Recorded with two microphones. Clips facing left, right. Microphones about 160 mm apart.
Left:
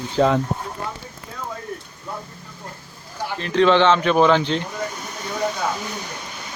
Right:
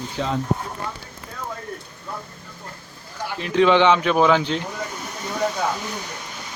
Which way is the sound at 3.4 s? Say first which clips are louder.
Even; 10° right (ahead or behind).